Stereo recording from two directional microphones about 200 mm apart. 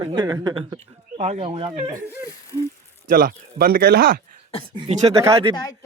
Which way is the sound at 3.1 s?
45° right (ahead or behind).